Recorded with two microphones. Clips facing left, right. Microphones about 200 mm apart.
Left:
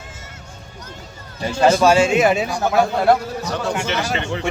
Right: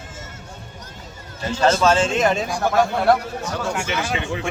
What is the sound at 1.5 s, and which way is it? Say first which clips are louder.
Speech: left 3 dB; 10° left (ahead or behind).